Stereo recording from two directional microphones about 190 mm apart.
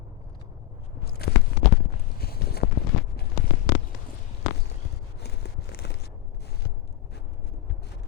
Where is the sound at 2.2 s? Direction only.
55° left (ahead or behind).